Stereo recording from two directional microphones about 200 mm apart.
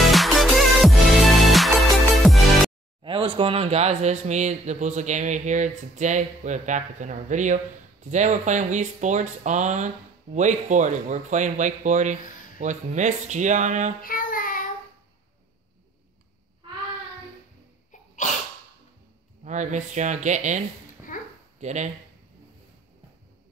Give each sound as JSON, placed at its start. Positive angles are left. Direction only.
{"t": 0.0, "sound": "music", "side_deg": 0}
{"t": 3.0, "sound": "speech", "side_deg": -25}
{"t": 14.0, "sound": "child singing", "side_deg": 45}
{"t": 18.2, "sound": "sneeze", "side_deg": 40}
{"t": 19.4, "sound": "speech", "side_deg": -35}
{"t": 21.1, "sound": "dog", "side_deg": 40}
{"t": 21.5, "sound": "speech", "side_deg": -35}